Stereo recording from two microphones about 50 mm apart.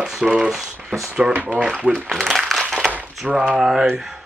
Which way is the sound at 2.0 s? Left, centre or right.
Centre.